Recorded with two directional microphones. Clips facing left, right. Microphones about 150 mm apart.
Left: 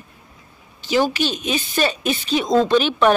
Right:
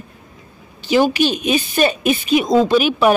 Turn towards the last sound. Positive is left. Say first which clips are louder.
# right 2 dB
turn(degrees=-10)  # may be behind; listen again after turning